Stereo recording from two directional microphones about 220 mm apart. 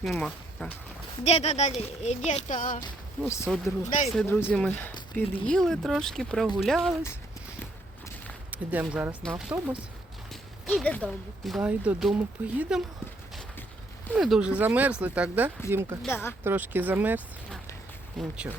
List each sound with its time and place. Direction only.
0.0 s speech: centre (ahead or behind)
1.2 s speech: 30° left (ahead or behind)
2.8 s speech: 15° left (ahead or behind)
8.4 s speech: 10° right (ahead or behind)
14.1 s speech: centre (ahead or behind)
16.0 s speech: 10° left (ahead or behind)
16.4 s speech: 10° right (ahead or behind)